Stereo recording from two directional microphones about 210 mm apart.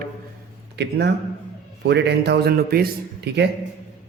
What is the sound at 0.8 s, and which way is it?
A man's voice, 55° right (ahead or behind).